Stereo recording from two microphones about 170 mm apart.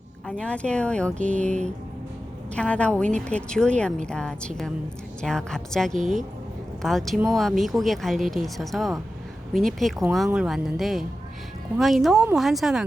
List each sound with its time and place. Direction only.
0.3 s speech: 5° left (ahead or behind)
1.5 s speech: 45° right (ahead or behind)
2.6 s speech: 5° left (ahead or behind)